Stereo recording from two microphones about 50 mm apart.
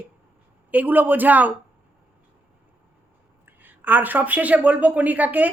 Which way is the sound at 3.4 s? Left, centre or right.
Right.